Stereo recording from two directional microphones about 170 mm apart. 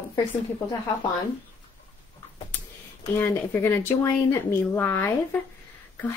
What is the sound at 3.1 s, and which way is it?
Speech, 15° left (ahead or behind).